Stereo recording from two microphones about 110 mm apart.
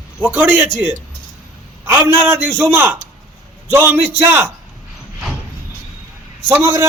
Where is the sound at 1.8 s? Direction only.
20° right (ahead or behind).